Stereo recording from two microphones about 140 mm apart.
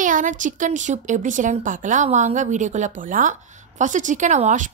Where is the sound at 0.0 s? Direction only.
70° right (ahead or behind).